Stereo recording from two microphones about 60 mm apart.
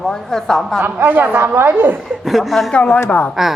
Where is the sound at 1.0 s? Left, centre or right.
Right.